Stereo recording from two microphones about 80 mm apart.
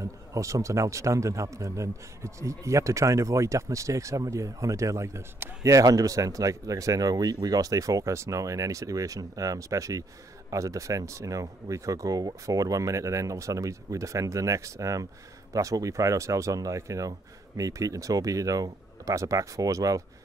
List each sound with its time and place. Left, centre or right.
0.3 s speech: right